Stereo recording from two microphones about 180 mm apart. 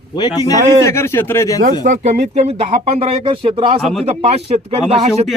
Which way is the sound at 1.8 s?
40° right (ahead or behind).